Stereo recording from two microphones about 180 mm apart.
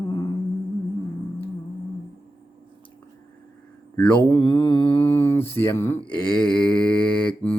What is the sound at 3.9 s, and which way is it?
Mantra, 5° left (ahead or behind).